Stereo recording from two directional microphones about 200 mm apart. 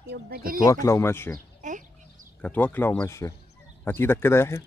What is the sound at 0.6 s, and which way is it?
Speech, 15° left (ahead or behind).